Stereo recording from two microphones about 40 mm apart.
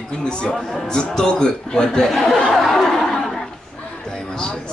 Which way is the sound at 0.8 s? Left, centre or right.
Centre.